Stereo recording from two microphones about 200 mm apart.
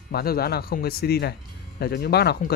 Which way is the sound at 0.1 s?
50° left (ahead or behind).